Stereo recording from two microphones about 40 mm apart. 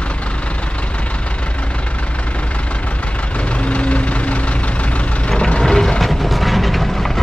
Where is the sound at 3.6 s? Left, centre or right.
Left.